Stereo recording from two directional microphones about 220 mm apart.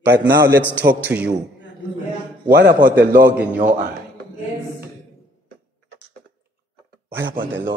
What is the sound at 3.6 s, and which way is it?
Speech, 35° right (ahead or behind).